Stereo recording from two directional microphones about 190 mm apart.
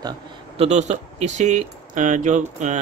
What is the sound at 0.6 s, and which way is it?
Speech, 35° right (ahead or behind).